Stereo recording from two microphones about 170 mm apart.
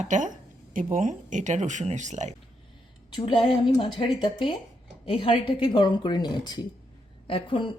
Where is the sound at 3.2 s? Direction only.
30° left (ahead or behind).